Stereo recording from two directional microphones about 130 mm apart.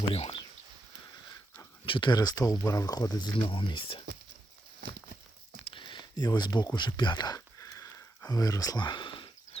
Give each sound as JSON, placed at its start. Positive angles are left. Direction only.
{"t": 0.1, "sound": "speech", "side_deg": 50}
{"t": 1.8, "sound": "speech", "side_deg": 40}
{"t": 5.7, "sound": "a sound", "side_deg": 35}